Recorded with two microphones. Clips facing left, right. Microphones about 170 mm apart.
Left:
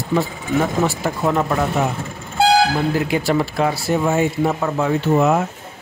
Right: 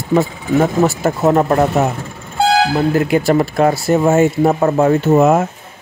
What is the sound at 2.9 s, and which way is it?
Speech, 50° right (ahead or behind).